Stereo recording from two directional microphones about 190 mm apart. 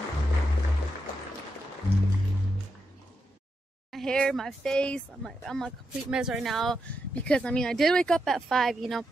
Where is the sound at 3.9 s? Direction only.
5° left (ahead or behind).